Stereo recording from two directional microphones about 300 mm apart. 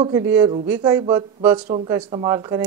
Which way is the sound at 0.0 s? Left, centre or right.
Centre.